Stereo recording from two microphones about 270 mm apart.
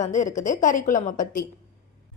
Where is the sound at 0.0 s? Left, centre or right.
Left.